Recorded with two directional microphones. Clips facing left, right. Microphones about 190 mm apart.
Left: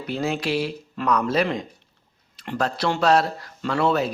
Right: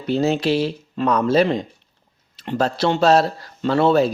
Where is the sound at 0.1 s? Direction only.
25° right (ahead or behind).